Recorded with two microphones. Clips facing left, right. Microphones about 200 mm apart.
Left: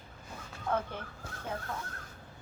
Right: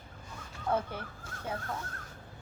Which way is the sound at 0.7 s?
10° right (ahead or behind).